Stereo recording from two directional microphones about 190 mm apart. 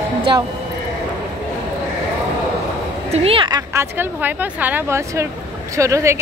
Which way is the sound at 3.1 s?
30° right (ahead or behind).